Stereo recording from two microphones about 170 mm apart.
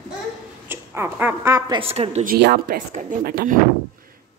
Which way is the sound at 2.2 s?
70° right (ahead or behind).